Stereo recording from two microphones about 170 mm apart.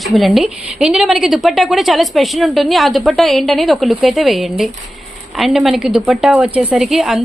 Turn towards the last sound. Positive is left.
turn(degrees=0)  # may be behind; listen again after turning